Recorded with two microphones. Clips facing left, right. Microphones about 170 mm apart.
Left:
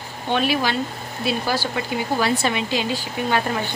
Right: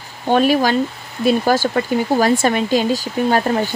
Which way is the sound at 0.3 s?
45° right (ahead or behind).